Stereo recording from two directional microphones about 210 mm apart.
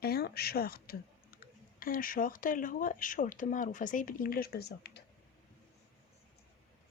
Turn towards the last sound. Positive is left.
turn(degrees=50)  # may be behind; listen again after turning